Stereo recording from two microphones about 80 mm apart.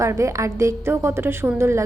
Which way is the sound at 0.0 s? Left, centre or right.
Right.